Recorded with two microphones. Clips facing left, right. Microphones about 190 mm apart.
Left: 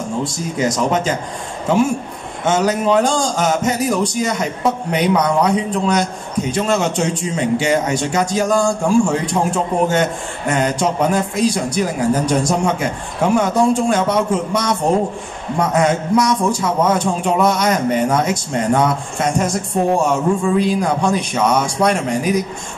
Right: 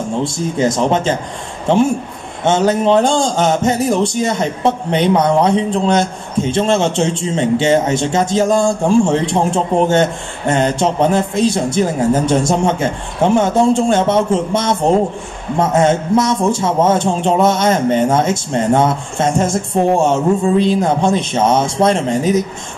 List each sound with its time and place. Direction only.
0.2 s speech: 25° right (ahead or behind)
2.4 s speech: 25° right (ahead or behind)